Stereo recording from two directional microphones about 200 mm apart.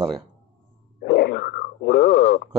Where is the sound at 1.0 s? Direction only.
55° left (ahead or behind).